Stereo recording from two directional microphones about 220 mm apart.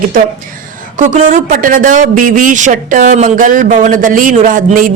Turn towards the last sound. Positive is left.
turn(degrees=-35)  # may be behind; listen again after turning